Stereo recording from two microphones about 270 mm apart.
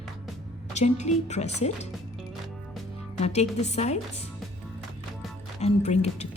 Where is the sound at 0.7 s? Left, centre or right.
Left.